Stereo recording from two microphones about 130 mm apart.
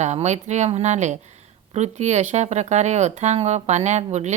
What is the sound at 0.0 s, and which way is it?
Speech, 60° right (ahead or behind).